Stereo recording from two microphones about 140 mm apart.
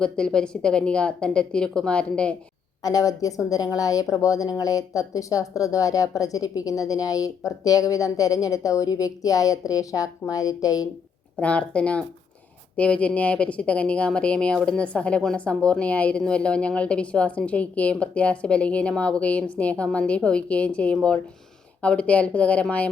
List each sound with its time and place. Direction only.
0.0 s speech: 5° left (ahead or behind)
2.8 s speech: 25° left (ahead or behind)
11.3 s speech: 10° left (ahead or behind)